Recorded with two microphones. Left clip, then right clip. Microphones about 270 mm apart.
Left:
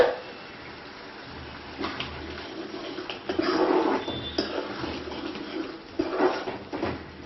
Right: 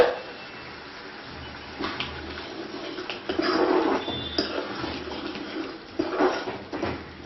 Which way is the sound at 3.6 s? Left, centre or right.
Centre.